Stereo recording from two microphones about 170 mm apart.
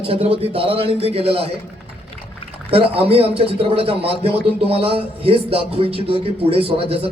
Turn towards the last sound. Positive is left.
turn(degrees=-35)  # may be behind; listen again after turning